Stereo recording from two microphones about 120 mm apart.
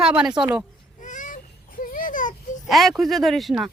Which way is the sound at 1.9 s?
90° left.